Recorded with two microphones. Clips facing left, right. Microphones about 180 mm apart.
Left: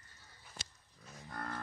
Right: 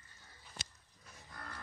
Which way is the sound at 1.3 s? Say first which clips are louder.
Left 8 dB; 55° left (ahead or behind).